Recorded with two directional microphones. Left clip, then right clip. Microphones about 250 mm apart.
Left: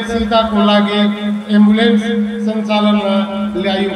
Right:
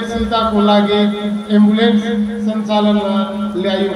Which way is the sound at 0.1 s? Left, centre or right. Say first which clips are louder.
Left 2 dB; left.